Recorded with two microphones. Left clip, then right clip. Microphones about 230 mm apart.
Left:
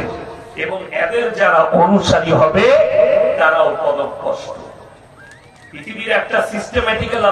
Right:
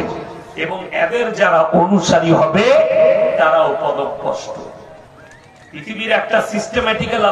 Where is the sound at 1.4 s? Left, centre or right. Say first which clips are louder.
Left 1 dB; right.